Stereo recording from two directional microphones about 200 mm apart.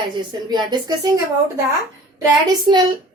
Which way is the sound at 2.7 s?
20° right (ahead or behind).